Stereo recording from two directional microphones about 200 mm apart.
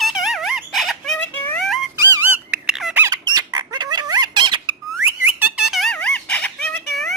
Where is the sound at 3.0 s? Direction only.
15° right (ahead or behind).